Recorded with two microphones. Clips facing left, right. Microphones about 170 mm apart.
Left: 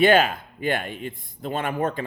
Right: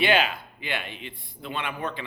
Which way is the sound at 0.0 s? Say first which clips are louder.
Left 6 dB; 45° left (ahead or behind).